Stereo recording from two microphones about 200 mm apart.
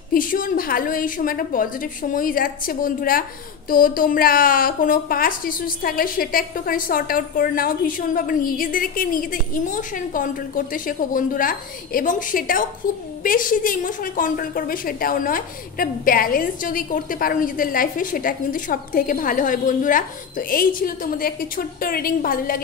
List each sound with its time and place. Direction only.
0.1 s a woman's voice: 45° left (ahead or behind)